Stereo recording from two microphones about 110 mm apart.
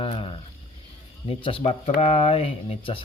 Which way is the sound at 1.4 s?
55° left (ahead or behind).